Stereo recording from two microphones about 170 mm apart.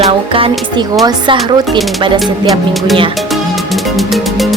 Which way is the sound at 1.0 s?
25° right (ahead or behind).